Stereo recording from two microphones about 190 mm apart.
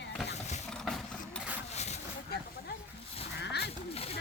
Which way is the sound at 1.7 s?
35° left (ahead or behind).